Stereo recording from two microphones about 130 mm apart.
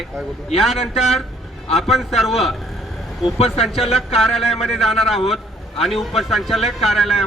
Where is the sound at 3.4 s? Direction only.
50° left (ahead or behind).